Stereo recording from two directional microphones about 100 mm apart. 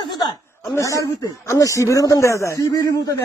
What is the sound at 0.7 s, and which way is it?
Speech, 30° left (ahead or behind).